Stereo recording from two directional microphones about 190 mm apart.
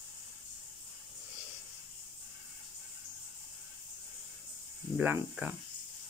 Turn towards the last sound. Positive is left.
turn(degrees=-10)  # may be behind; listen again after turning